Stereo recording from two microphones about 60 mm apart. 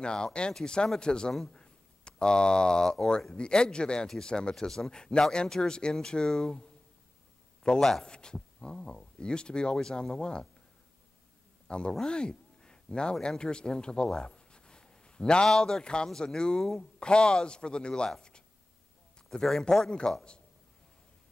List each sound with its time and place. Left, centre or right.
0.0 s a man's voice: centre
2.0 s speech: centre
7.6 s speech: centre
11.6 s a sound: centre
11.9 s speech: centre
19.4 s speech: centre